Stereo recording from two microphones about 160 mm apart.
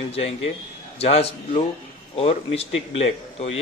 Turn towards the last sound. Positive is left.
turn(degrees=40)  # may be behind; listen again after turning